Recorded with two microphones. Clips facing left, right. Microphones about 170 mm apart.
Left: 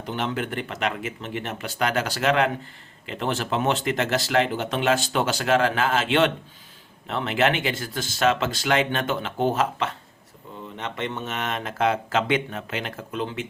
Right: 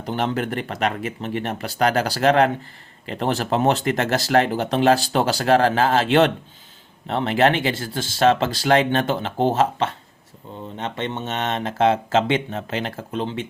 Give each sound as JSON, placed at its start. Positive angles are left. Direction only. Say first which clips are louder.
{"t": 0.0, "sound": "speech", "louder": "right 4 dB", "side_deg": -40}